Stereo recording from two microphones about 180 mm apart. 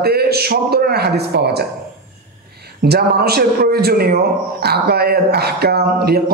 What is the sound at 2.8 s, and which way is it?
A man's voice, 60° right (ahead or behind).